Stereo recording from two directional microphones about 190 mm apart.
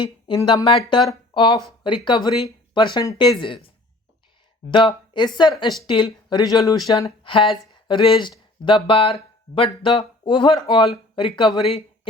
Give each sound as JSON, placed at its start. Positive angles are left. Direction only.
{"t": 0.0, "sound": "speech", "side_deg": 25}
{"t": 4.7, "sound": "speech", "side_deg": 25}